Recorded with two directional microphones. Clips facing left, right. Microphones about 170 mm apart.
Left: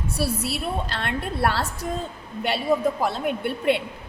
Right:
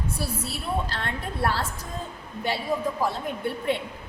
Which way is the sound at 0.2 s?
75° left (ahead or behind).